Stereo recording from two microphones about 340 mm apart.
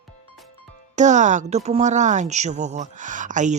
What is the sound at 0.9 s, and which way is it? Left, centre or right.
Speech, right.